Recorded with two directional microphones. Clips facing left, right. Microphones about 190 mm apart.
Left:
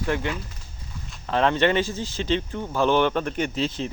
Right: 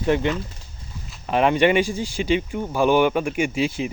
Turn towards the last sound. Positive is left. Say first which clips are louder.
# right 3 dB
turn(degrees=-10)  # may be behind; listen again after turning